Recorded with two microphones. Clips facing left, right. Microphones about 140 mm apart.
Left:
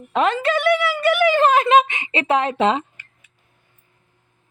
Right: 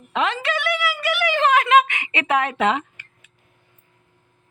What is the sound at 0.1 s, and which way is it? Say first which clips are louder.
Speech: left 4 dB; 45° left (ahead or behind).